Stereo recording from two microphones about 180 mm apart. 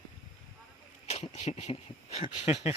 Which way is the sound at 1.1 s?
35° left (ahead or behind).